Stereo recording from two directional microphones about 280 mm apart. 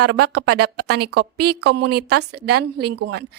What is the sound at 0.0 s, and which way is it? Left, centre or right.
Speech, right.